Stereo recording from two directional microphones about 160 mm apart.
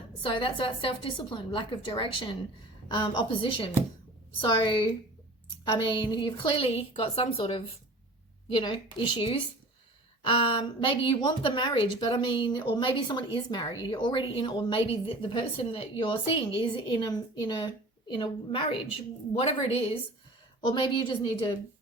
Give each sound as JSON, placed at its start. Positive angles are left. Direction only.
{"t": 0.2, "sound": "a woman's voice", "side_deg": 30}
{"t": 5.7, "sound": "a woman's voice", "side_deg": 30}